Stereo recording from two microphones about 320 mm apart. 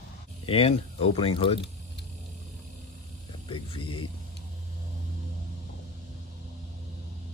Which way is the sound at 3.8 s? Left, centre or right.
Left.